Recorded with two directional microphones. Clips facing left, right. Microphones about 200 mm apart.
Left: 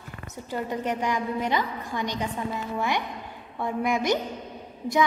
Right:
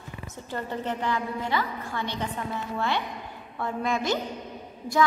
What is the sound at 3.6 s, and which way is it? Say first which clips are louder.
Speech: left 2 dB; 15° left (ahead or behind).